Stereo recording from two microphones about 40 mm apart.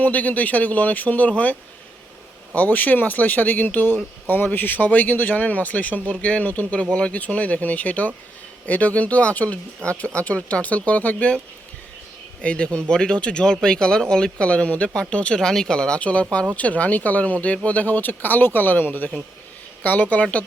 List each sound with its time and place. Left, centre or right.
0.0 s speech: left
2.6 s speech: left
6.9 s speech: left
7.2 s speech: left
12.4 s speech: left
15.4 s speech: centre; by 17.8 s left
17.8 s speech: left